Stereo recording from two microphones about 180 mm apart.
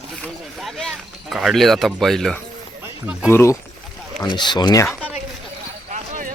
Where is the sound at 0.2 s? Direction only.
Centre (ahead or behind).